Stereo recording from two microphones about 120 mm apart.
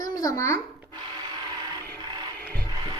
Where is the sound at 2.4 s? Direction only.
15° left (ahead or behind).